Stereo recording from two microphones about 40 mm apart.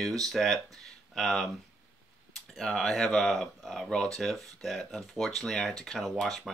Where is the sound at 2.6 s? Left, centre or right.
Centre.